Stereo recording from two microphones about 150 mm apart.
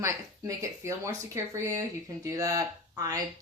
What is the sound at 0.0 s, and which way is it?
A woman's voice, 20° right (ahead or behind).